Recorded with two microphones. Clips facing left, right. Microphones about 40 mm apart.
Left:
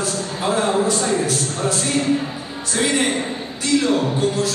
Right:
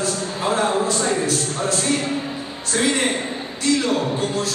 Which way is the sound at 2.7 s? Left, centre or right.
Left.